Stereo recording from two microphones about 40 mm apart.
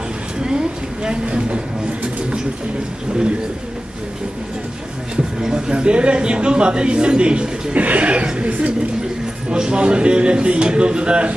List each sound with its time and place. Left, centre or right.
0.4 s a man's voice: centre
5.1 s speech: centre
5.5 s a man's voice: right
7.8 s a man's voice: right